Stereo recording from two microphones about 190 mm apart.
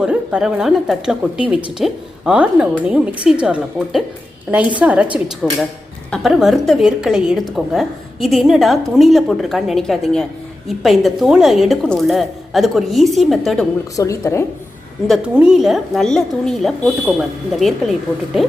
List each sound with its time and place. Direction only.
0.0 s a woman's voice: 5° right (ahead or behind)
13.9 s a woman's voice: 15° left (ahead or behind)
15.0 s a woman's voice: 5° right (ahead or behind)